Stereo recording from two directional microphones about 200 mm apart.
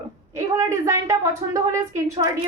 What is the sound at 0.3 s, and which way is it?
Speech, 15° right (ahead or behind).